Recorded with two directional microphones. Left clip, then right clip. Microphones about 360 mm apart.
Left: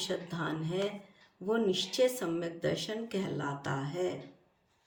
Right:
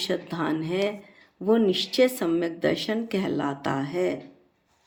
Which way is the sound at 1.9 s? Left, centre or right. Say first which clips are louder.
Right 8 dB; centre.